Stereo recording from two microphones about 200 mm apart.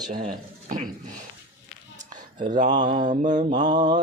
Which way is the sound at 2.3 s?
25° right (ahead or behind).